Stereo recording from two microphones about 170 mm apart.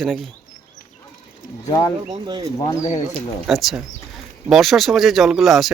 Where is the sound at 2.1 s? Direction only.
25° right (ahead or behind).